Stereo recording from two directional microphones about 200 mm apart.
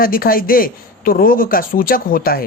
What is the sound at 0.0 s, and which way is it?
Speech, 45° left (ahead or behind).